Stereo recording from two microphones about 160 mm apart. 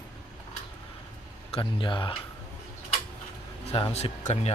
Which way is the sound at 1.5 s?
30° left (ahead or behind).